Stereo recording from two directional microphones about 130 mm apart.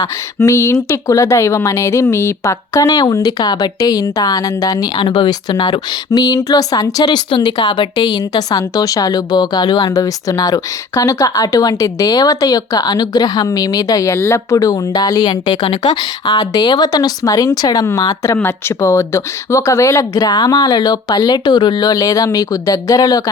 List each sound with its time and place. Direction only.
0.0 s speech: 25° left (ahead or behind)